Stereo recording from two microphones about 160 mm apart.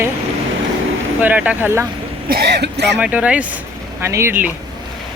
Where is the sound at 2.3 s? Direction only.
85° right.